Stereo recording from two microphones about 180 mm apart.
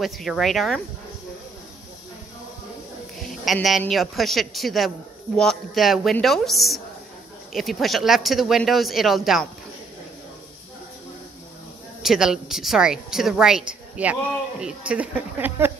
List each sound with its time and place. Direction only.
0.0 s a woman's voice: centre (ahead or behind)
3.2 s a woman's voice: centre (ahead or behind)
12.0 s a woman's voice: 5° right (ahead or behind)